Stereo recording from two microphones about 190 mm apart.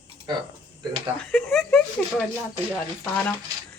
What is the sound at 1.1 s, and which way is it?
Speech, centre (ahead or behind).